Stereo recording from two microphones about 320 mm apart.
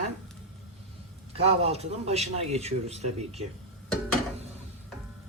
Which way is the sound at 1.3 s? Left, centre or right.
Centre.